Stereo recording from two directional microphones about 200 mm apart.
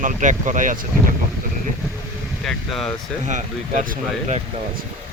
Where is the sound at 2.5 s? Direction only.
Centre (ahead or behind).